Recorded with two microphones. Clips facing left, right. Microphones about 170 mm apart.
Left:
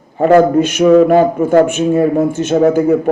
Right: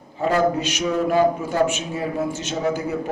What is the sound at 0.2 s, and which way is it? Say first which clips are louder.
Speech: left 11 dB; 55° left (ahead or behind).